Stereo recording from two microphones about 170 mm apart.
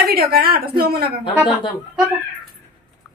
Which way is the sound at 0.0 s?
60° right (ahead or behind).